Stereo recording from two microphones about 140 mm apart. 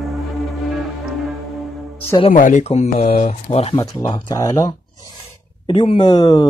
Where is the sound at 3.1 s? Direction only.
65° left (ahead or behind); by 3.8 s 50° left (ahead or behind).